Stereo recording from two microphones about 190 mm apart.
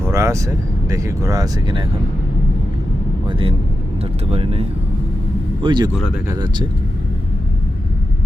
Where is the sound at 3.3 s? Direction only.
25° right (ahead or behind).